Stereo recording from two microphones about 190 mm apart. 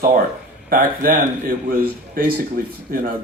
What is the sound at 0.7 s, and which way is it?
Speech, 50° right (ahead or behind).